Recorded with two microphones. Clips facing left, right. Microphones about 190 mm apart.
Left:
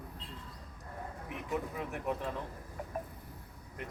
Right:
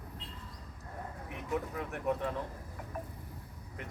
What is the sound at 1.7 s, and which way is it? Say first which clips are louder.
Speech: right 2 dB; centre (ahead or behind).